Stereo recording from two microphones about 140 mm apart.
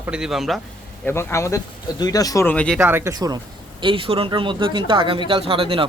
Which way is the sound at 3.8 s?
40° right (ahead or behind).